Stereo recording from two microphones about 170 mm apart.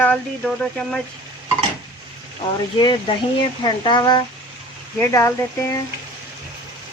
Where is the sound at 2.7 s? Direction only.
25° left (ahead or behind).